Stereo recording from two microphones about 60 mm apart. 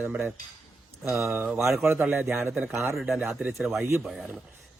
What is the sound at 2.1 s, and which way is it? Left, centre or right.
Speech, right.